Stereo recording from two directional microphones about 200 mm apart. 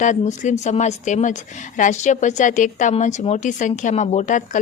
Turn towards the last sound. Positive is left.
turn(degrees=40)  # may be behind; listen again after turning